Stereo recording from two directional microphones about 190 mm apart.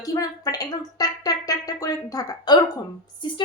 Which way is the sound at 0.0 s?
20° left (ahead or behind).